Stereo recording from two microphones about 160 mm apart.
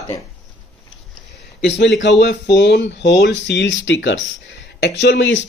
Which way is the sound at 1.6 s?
90° left.